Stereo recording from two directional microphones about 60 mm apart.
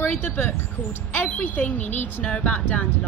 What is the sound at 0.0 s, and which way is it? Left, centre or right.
A woman's voice, left.